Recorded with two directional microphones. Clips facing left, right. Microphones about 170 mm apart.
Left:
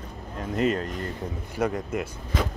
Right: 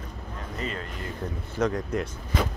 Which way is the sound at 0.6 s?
45° left (ahead or behind).